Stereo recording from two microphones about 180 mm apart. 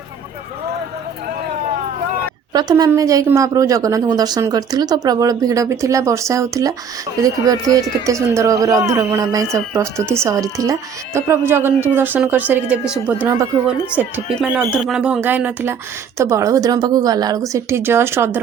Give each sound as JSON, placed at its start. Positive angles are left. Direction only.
{"t": 2.5, "sound": "speech", "side_deg": -20}